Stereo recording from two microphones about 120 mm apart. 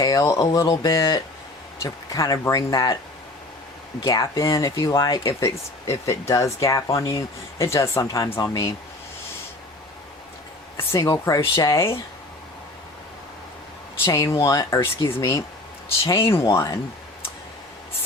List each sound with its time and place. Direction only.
0.0 s speech: 30° left (ahead or behind)
4.0 s speech: 30° left (ahead or behind)
10.8 s speech: 25° left (ahead or behind)
14.0 s speech: 25° left (ahead or behind)